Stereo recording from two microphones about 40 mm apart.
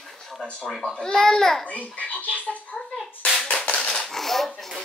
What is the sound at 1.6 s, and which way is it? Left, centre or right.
Speech, left.